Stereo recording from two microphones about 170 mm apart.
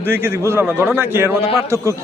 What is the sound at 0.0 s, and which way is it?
A man's voice, 15° right (ahead or behind).